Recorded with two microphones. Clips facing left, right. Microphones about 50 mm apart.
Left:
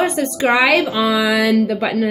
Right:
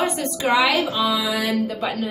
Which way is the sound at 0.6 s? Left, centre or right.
Left.